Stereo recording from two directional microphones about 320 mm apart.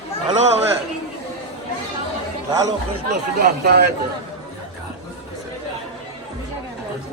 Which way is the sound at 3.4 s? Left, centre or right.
Right.